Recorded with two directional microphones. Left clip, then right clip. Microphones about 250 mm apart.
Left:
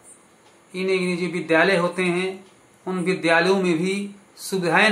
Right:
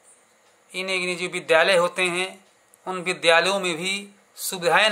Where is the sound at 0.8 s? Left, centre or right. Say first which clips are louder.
Left 2 dB; right.